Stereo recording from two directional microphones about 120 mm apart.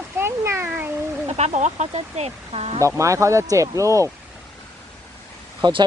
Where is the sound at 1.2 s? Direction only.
65° right (ahead or behind).